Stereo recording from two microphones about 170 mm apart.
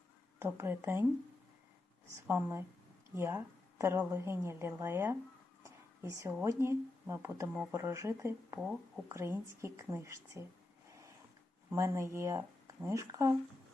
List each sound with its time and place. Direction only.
0.3 s speech: 15° right (ahead or behind)
2.2 s a woman's voice: 15° right (ahead or behind)
5.6 s a sound: 15° right (ahead or behind)
6.4 s speech: 15° right (ahead or behind)
8.5 s speech: 5° right (ahead or behind)
9.0 s speech: 15° right (ahead or behind)
10.8 s a sound: 15° right (ahead or behind)
11.7 s speech: 15° right (ahead or behind)